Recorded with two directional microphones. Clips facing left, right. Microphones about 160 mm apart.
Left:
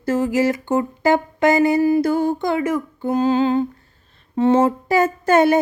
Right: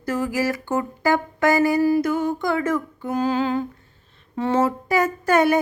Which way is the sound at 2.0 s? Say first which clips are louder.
Left 3 dB; 30° left (ahead or behind).